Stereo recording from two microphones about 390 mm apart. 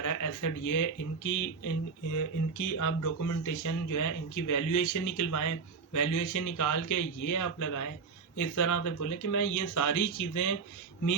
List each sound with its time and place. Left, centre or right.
0.0 s speech: left